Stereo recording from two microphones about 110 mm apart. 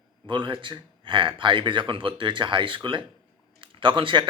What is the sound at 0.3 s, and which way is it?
Speech, 45° right (ahead or behind).